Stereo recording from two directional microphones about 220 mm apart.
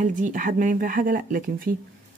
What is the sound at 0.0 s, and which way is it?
Speech, 35° right (ahead or behind).